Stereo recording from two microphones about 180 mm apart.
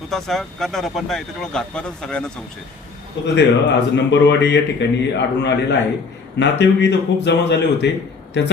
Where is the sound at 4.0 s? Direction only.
80° left.